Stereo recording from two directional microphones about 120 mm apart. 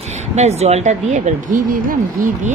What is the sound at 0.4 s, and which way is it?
Speech, 65° right (ahead or behind).